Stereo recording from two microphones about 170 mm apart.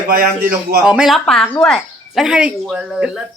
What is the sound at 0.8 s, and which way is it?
Speech, 5° right (ahead or behind).